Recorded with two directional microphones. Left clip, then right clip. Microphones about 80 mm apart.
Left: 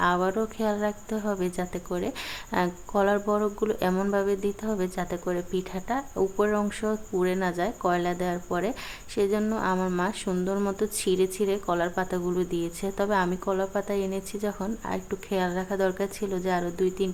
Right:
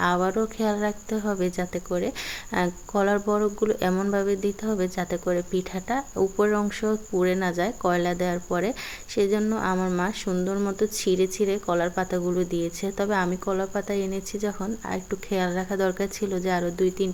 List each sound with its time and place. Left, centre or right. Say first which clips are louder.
0.0 s speech: right 1 dB; right